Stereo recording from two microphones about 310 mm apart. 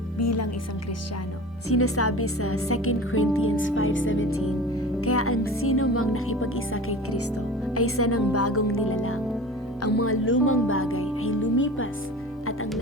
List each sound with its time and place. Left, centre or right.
0.2 s a woman's voice: left
1.7 s speech: left